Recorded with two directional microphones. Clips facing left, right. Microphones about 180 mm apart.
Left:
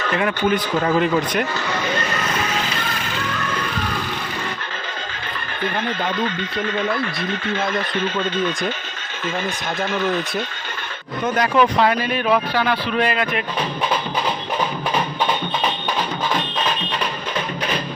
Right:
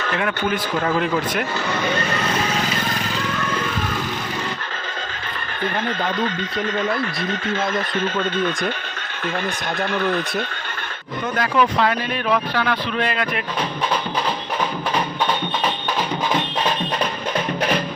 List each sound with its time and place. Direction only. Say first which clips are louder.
0.2 s speech: left 4 dB; centre (ahead or behind)
6.9 s speech: even; centre (ahead or behind)
9.9 s speech: even; centre (ahead or behind)
11.3 s speech: left 2 dB; 15° left (ahead or behind)
12.1 s speech: left 2 dB; 5° left (ahead or behind)